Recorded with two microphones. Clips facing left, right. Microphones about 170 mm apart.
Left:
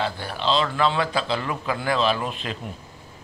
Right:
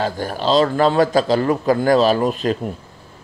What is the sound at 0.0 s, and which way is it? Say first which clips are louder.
A man's voice: right 5 dB; 45° right (ahead or behind).